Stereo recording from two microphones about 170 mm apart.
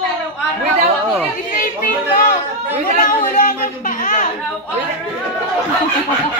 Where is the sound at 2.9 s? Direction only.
50° left (ahead or behind).